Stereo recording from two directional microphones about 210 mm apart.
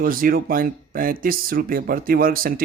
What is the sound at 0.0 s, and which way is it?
Speech, 40° right (ahead or behind).